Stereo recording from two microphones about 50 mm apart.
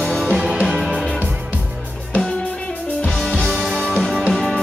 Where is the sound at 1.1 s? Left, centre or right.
Right.